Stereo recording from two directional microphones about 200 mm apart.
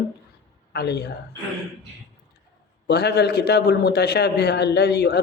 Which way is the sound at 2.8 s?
55° left (ahead or behind).